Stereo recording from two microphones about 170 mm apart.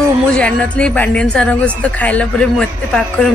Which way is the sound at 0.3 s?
5° left (ahead or behind).